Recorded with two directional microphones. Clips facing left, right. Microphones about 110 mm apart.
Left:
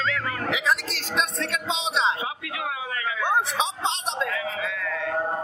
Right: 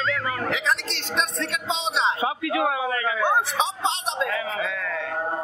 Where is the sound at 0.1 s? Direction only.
5° left (ahead or behind).